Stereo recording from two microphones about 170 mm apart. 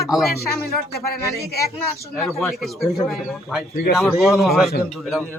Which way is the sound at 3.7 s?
65° left (ahead or behind).